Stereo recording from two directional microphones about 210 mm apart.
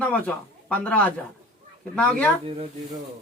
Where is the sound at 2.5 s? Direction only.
25° right (ahead or behind).